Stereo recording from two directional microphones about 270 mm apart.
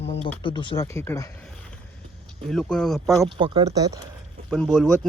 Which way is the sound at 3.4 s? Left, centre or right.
Centre.